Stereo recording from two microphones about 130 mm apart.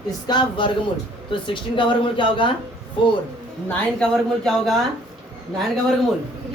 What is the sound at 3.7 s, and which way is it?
Speech, 5° left (ahead or behind).